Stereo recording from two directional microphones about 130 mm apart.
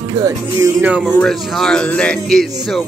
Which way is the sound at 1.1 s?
5° left (ahead or behind).